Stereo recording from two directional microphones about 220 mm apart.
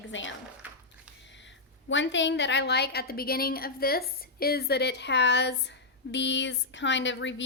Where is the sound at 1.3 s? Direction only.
55° left (ahead or behind).